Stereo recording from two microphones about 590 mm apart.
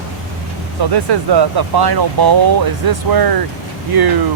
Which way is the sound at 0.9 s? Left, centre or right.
Right.